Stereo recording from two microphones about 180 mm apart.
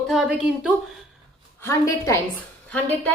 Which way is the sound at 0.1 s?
5° right (ahead or behind).